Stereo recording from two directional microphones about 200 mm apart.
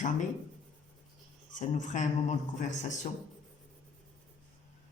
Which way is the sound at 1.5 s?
40° left (ahead or behind).